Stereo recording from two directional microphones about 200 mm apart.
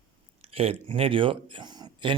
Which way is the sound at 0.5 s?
30° right (ahead or behind).